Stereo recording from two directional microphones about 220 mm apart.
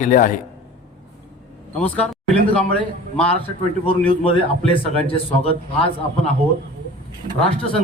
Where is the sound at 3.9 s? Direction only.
25° left (ahead or behind).